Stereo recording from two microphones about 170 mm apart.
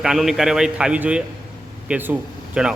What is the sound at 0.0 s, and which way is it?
A man's voice, centre (ahead or behind).